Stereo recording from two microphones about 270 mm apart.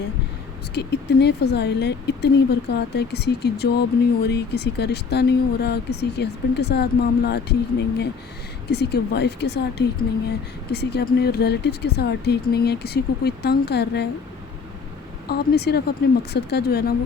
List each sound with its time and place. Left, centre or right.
0.7 s speech: left
15.3 s speech: left